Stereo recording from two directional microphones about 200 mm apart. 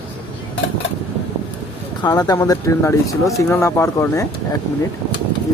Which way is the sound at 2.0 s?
20° left (ahead or behind).